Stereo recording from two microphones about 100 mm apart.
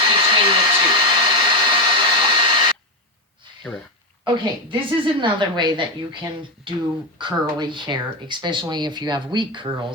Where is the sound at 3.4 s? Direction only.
50° right (ahead or behind).